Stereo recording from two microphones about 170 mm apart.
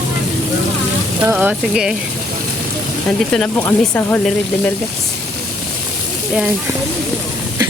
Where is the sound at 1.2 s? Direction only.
10° right (ahead or behind).